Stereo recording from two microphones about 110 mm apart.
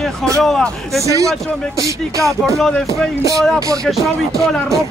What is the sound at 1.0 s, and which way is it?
Speech, 30° right (ahead or behind).